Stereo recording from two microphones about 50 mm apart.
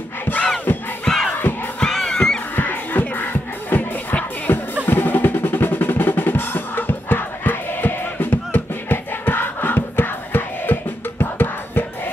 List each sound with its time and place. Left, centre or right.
0.3 s battle cry: left
1.0 s crowd: centre
1.8 s music: centre
2.5 s music: left
4.8 s drum roll: left